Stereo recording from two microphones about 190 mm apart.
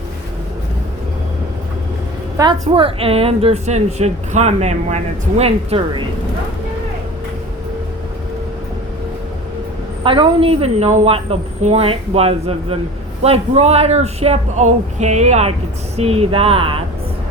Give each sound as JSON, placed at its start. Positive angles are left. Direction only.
{"t": 2.4, "sound": "a woman's voice", "side_deg": -25}
{"t": 10.0, "sound": "a woman's voice", "side_deg": -25}